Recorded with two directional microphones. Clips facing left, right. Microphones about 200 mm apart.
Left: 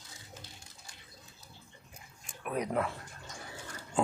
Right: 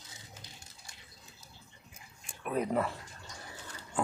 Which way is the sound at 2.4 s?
Centre (ahead or behind).